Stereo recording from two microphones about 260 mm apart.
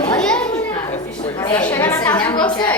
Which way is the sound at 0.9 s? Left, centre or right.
Centre.